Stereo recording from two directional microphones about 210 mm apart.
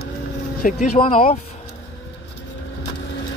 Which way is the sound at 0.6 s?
40° left (ahead or behind).